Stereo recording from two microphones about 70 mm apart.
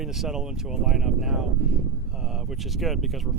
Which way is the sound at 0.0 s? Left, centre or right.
Centre.